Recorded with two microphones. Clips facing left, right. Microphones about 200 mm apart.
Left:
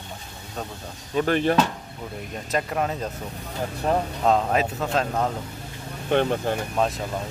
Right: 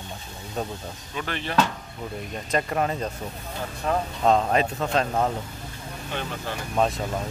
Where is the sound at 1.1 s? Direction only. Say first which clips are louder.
Left 11 dB; 45° left (ahead or behind).